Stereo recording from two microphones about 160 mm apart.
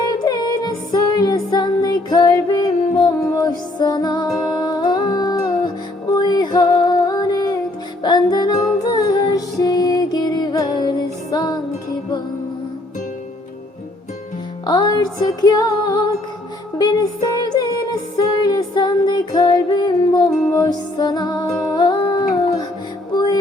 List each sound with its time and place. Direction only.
0.1 s music: 25° left (ahead or behind)
14.7 s music: 25° left (ahead or behind)
21.8 s humming: 30° left (ahead or behind)
23.1 s music: 25° left (ahead or behind)